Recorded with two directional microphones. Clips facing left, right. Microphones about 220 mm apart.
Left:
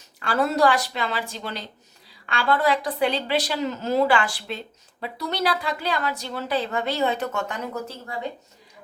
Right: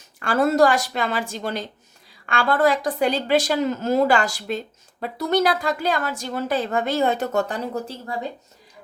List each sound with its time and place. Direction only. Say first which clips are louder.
0.2 s a woman's voice: right 4 dB; 45° right (ahead or behind); by 8.1 s 30° right (ahead or behind)